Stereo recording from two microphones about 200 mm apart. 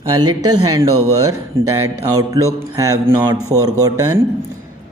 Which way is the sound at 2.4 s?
15° right (ahead or behind).